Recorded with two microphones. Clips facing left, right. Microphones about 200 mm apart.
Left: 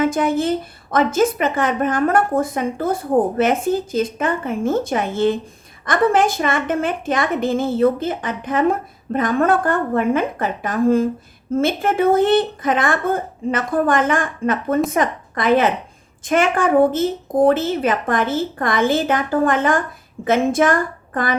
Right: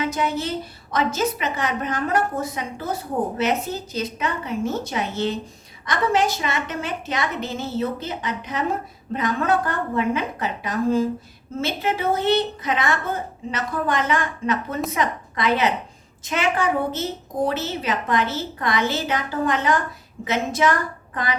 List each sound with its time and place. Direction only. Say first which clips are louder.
0.0 s a woman's voice: left 7 dB; 50° left (ahead or behind)